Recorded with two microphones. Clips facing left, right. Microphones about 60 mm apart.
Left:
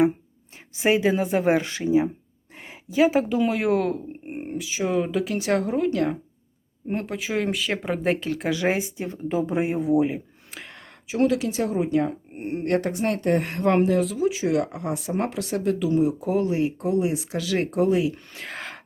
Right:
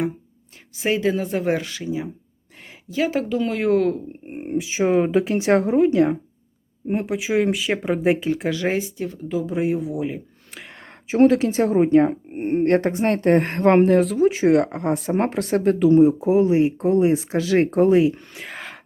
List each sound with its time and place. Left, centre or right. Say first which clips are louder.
0.8 s a woman's voice: left 1 dB; centre
1.6 s speech: left 6 dB; left
2.9 s speech: left 2 dB; centre
4.5 s speech: right 6 dB; right; by 8.3 s centre
8.4 s a woman's voice: left 1 dB; centre
8.8 s speech: right 1 dB; left
10.1 s a sound: even; centre
11.1 s speech: right 6 dB; right
18.3 s whispering: even; centre